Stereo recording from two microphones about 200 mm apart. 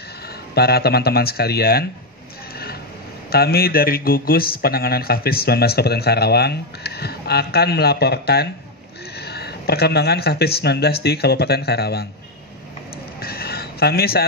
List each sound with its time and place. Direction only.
0.6 s speech: 50° left (ahead or behind)
3.3 s speech: 50° left (ahead or behind)
13.2 s a sound: 50° left (ahead or behind)